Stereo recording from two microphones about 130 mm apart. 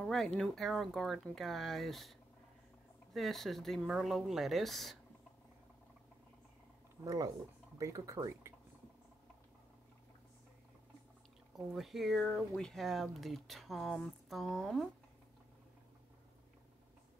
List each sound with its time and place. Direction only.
0.0 s speech: 5° left (ahead or behind)
7.7 s speech: 25° right (ahead or behind)
11.5 s speech: centre (ahead or behind)